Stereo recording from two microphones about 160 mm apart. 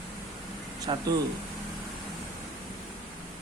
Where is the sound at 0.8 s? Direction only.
25° right (ahead or behind).